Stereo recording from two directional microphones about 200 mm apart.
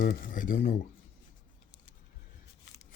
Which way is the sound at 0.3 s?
40° left (ahead or behind).